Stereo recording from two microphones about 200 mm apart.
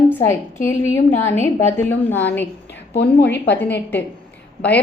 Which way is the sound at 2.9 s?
60° left (ahead or behind).